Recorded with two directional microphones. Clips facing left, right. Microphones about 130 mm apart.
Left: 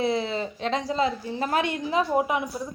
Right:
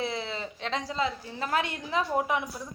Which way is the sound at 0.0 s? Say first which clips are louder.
Left 7 dB; 20° left (ahead or behind).